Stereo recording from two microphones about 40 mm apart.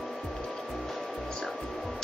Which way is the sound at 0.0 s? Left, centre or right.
Centre.